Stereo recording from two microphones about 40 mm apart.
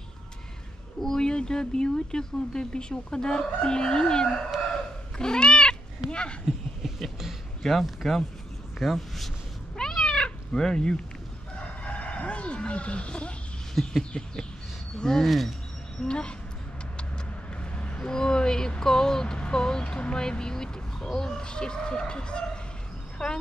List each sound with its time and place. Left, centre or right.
1.0 s speech: centre
7.6 s speech: centre
9.8 s cat: centre
11.5 s crowing: left
13.8 s a sound: centre
14.1 s speech: left
15.0 s speech: centre
15.2 s speech: centre
16.0 s speech: left
17.6 s a sound: left
21.2 s speech: centre